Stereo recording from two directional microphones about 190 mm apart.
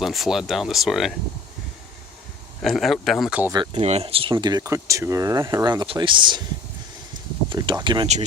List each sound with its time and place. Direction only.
0.0 s speech: centre (ahead or behind)
2.6 s speech: centre (ahead or behind)
3.5 s speech: 25° right (ahead or behind)
7.5 s speech: 25° right (ahead or behind)